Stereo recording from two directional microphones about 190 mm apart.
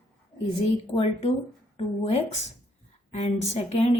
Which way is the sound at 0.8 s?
30° left (ahead or behind).